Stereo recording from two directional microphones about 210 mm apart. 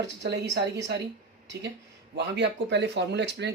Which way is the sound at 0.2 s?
55° right (ahead or behind).